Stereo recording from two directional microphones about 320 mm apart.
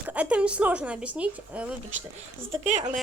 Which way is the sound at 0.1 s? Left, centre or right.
Centre.